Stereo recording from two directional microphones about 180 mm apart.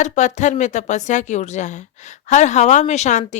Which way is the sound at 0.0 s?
40° left (ahead or behind).